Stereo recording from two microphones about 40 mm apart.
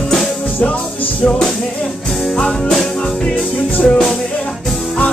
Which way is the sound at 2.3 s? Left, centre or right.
Centre.